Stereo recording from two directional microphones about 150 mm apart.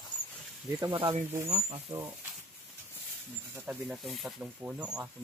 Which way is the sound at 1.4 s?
50° right (ahead or behind).